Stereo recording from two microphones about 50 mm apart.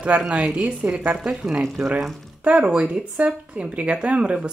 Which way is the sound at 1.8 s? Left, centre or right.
Right.